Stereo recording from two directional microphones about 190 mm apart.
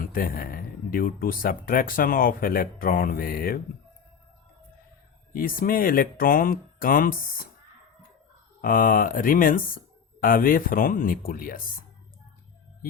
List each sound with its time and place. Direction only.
0.0 s speech: 50° left (ahead or behind)
5.3 s speech: 50° left (ahead or behind)
8.6 s speech: 45° left (ahead or behind)